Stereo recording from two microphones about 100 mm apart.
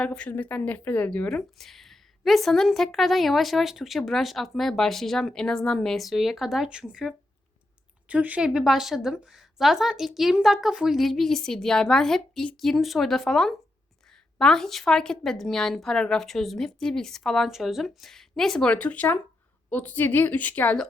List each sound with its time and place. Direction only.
0.0 s a woman's voice: 10° left (ahead or behind)